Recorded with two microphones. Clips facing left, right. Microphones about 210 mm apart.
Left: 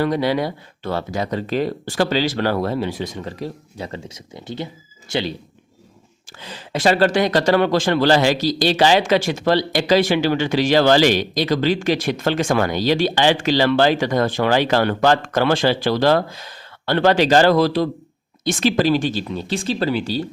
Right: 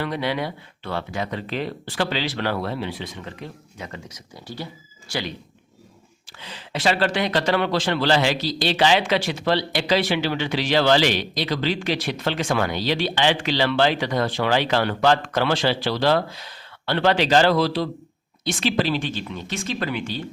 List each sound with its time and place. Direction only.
0.0 s speech: 40° left (ahead or behind); by 5.3 s 25° left (ahead or behind)
6.4 s speech: 45° left (ahead or behind)